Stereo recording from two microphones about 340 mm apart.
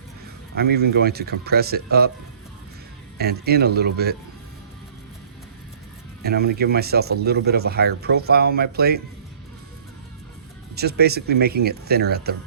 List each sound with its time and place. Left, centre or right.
0.5 s speech: right
3.2 s speech: right
6.2 s speech: right
10.8 s speech: right